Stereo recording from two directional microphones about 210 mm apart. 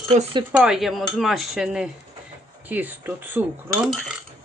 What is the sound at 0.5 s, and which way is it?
Speech, 5° right (ahead or behind).